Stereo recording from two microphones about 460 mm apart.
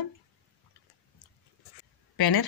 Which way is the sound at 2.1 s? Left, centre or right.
Left.